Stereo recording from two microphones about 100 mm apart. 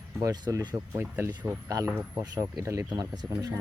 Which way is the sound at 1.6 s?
30° right (ahead or behind).